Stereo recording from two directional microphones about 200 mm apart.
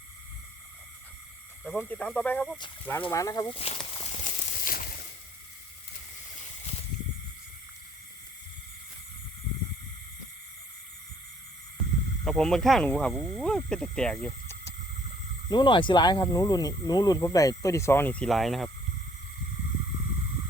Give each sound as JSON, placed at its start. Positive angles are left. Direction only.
{"t": 1.8, "sound": "speech", "side_deg": 5}
{"t": 3.1, "sound": "speech", "side_deg": 15}
{"t": 3.6, "sound": "a sound", "side_deg": 30}
{"t": 12.2, "sound": "speech", "side_deg": 0}
{"t": 15.4, "sound": "speech", "side_deg": 20}